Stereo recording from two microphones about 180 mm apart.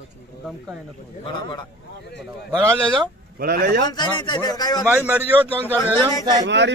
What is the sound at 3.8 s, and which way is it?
A man's voice, 25° left (ahead or behind).